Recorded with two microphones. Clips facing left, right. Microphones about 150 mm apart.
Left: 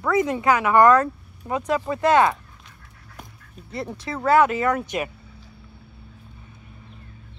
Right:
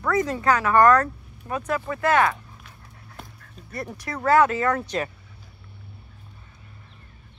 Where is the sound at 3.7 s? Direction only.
25° left (ahead or behind).